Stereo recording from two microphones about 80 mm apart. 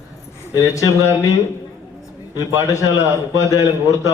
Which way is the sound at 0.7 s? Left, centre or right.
Left.